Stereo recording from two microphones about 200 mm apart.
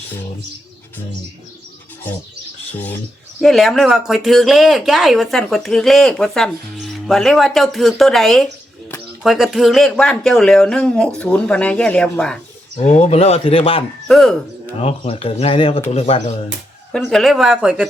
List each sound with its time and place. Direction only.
3.4 s speech: centre (ahead or behind)
12.7 s speech: 35° left (ahead or behind)
14.1 s speech: centre (ahead or behind)
14.8 s speech: 30° left (ahead or behind)
16.9 s speech: centre (ahead or behind)